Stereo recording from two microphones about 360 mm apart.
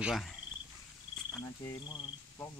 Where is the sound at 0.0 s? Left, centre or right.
Centre.